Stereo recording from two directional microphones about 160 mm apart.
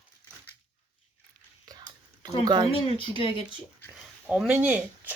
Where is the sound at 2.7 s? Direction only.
35° left (ahead or behind).